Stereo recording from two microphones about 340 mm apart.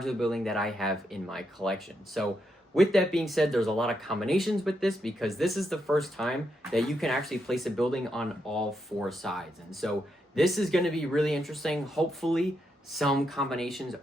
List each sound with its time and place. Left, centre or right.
0.0 s speech: centre